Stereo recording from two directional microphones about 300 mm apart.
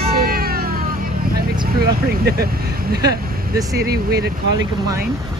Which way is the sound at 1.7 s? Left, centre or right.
Right.